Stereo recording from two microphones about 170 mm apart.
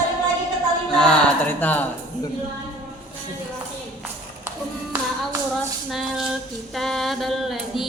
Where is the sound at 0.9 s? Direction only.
5° left (ahead or behind).